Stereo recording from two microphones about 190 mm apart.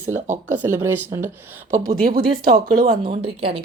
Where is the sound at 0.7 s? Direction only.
10° right (ahead or behind).